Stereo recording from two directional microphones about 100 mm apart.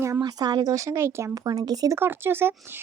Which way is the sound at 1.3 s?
40° right (ahead or behind).